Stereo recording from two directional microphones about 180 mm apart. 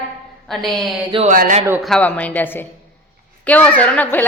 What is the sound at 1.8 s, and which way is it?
A woman's voice, 5° left (ahead or behind).